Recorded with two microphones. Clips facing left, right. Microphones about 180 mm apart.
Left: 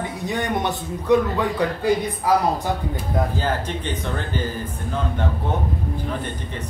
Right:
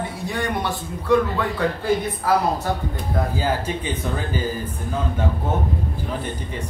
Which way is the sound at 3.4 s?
10° right (ahead or behind).